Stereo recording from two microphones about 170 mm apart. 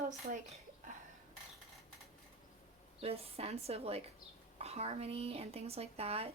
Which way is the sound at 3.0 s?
35° right (ahead or behind).